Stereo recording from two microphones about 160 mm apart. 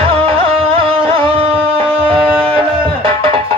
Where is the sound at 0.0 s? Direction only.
35° right (ahead or behind).